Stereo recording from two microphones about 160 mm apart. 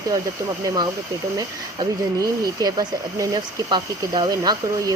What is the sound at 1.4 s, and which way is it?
Speech, 25° right (ahead or behind).